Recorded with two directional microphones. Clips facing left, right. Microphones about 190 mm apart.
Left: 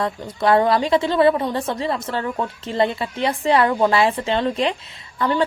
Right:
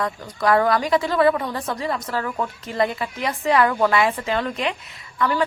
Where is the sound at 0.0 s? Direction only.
25° left (ahead or behind).